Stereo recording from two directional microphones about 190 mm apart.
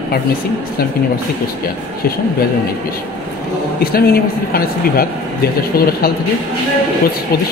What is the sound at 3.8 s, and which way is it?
Speech, 50° left (ahead or behind).